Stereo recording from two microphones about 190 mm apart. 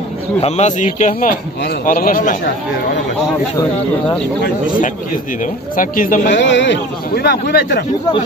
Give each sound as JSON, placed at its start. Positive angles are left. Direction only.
{"t": 0.4, "sound": "a man's voice", "side_deg": 35}
{"t": 4.4, "sound": "a man's voice", "side_deg": 45}
{"t": 6.3, "sound": "a man's voice", "side_deg": 70}